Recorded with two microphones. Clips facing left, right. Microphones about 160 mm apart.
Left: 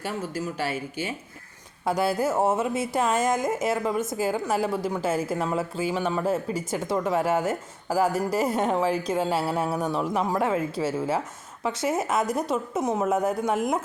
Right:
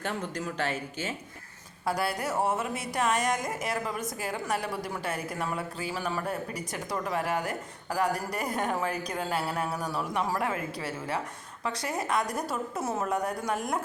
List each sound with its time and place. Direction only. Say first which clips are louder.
0.0 s speech: left 3 dB; 5° left (ahead or behind)
2.0 s speech: left 7 dB; 25° left (ahead or behind)